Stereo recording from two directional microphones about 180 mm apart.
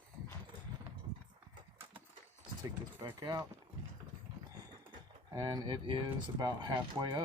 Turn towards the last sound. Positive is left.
turn(degrees=-25)  # may be behind; listen again after turning